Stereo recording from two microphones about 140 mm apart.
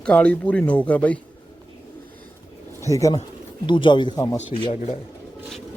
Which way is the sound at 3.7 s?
35° left (ahead or behind).